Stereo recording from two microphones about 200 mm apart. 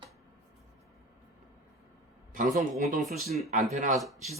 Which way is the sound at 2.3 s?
40° right (ahead or behind).